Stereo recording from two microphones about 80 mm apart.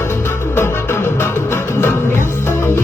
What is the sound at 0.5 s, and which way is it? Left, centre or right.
Music, left.